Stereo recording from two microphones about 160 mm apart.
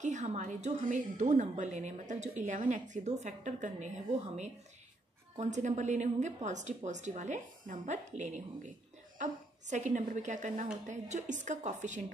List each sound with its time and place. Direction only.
0.0 s a woman's voice: 50° right (ahead or behind)